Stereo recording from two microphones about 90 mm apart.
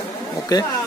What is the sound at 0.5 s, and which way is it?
Speech, 45° left (ahead or behind).